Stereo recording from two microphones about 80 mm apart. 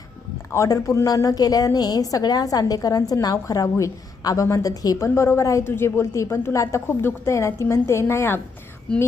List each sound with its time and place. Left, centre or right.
0.5 s a woman's voice: left
5.0 s a woman's voice: left